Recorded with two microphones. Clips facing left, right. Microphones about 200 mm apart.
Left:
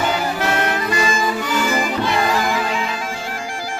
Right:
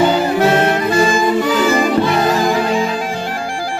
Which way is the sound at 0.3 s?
30° right (ahead or behind).